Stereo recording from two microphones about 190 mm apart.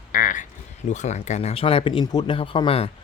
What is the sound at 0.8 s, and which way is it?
Speech, 40° left (ahead or behind).